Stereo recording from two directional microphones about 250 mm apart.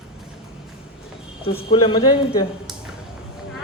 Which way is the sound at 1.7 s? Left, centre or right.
Left.